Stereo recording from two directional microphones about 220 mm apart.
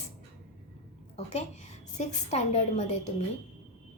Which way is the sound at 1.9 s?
30° left (ahead or behind).